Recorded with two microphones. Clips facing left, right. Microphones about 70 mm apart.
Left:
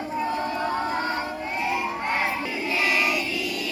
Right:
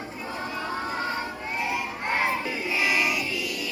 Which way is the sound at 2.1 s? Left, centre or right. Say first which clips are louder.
Right 4 dB; centre.